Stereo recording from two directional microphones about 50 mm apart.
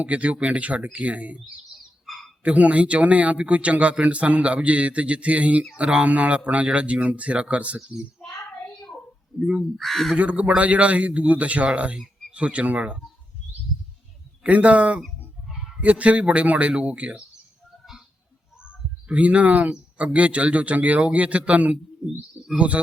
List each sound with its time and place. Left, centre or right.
0.0 s speech: right
2.4 s speech: right
9.4 s speech: right
9.7 s speech: centre
10.2 s speech: right
14.4 s speech: right
15.4 s a sound: centre
15.8 s speech: right
19.0 s speech: right